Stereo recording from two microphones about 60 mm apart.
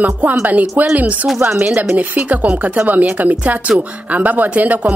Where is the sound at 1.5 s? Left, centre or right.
Centre.